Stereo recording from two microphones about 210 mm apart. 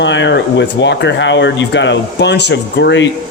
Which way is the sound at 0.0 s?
60° left (ahead or behind).